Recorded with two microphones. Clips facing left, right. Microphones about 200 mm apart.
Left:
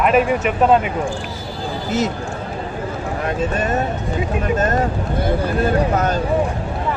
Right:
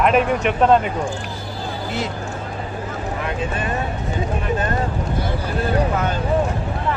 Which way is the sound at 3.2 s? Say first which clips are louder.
Left 6 dB; 40° left (ahead or behind).